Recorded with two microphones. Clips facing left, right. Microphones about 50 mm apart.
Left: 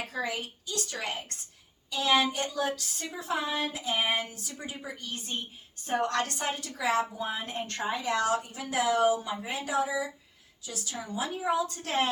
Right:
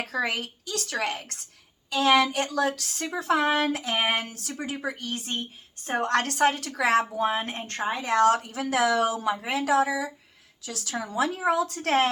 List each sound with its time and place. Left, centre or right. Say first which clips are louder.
0.0 s a woman's voice: right 5 dB; right
1.9 s a woman's voice: right 5 dB; right
6.7 s speech: right 5 dB; right
10.7 s a woman's voice: right 5 dB; right